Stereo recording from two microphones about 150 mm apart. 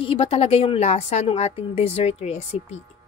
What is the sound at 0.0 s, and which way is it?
A woman's voice, 40° left (ahead or behind).